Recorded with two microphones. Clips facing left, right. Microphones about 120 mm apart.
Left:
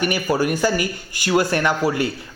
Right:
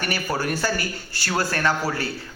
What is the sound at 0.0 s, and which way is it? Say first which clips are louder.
A man's voice: left 6 dB; 15° left (ahead or behind).